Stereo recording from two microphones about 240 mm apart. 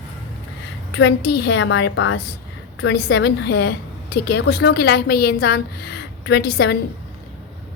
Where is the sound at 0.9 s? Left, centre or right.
Left.